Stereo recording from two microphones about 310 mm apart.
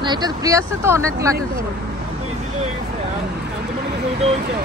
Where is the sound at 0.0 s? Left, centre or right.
Centre.